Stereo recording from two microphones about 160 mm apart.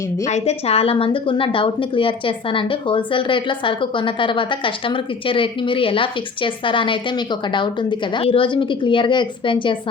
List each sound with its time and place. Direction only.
0.3 s a woman's voice: 40° left (ahead or behind)